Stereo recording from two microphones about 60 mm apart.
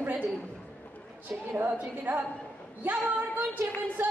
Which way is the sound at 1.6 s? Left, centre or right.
Right.